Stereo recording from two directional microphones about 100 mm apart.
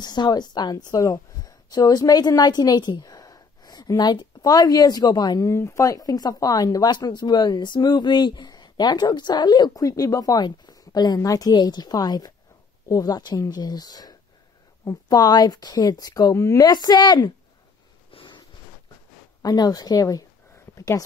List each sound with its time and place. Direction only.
0.0 s a woman's voice: 45° left (ahead or behind)
5.5 s speech: 30° left (ahead or behind)
16.6 s speech: 45° left (ahead or behind)
18.1 s a sound: 55° left (ahead or behind)
19.4 s speech: 40° left (ahead or behind)
20.7 s a sound: 35° left (ahead or behind)